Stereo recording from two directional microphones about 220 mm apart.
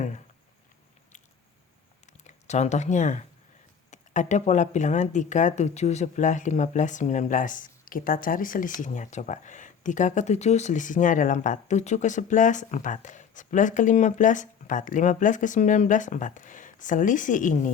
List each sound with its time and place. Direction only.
2.2 s speech: 30° left (ahead or behind)